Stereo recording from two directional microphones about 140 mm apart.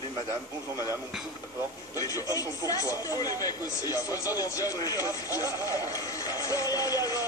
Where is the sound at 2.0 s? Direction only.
25° left (ahead or behind).